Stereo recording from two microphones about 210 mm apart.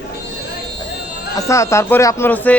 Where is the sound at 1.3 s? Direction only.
15° left (ahead or behind).